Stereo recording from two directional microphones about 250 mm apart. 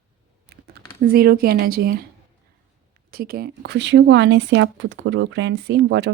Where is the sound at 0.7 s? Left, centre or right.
Right.